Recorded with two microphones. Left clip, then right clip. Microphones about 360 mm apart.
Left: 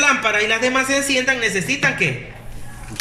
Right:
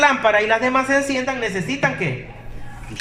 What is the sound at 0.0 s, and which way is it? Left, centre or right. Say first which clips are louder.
A man's voice: right 1 dB; right.